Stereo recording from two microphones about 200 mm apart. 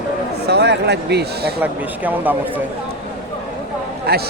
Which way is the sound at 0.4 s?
55° right (ahead or behind).